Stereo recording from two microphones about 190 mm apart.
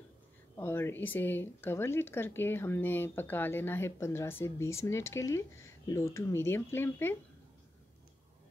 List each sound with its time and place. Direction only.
0.6 s speech: 10° left (ahead or behind)